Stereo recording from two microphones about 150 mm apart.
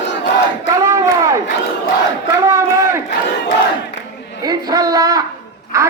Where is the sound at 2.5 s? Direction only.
20° right (ahead or behind).